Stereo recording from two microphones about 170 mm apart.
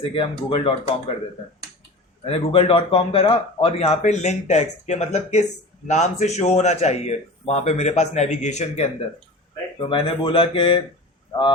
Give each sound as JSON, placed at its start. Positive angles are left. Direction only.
{"t": 0.1, "sound": "speech", "side_deg": 30}
{"t": 2.2, "sound": "speech", "side_deg": 35}
{"t": 9.8, "sound": "speech", "side_deg": 30}